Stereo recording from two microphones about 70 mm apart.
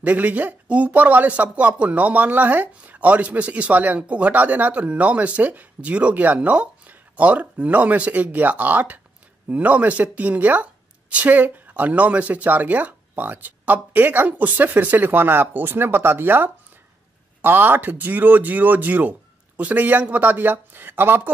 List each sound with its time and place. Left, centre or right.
0.0 s speech: right